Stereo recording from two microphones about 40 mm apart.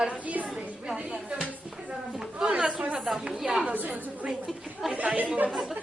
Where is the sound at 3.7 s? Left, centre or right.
Right.